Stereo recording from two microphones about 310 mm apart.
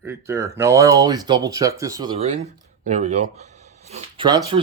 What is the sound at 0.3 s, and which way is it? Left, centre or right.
Speech, centre.